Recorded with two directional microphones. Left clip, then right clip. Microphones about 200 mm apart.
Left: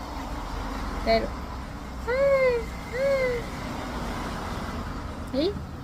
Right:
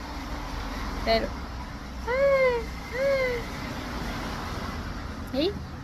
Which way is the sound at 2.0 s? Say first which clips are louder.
Even; 15° left (ahead or behind).